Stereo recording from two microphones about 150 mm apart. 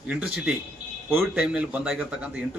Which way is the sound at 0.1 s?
10° right (ahead or behind).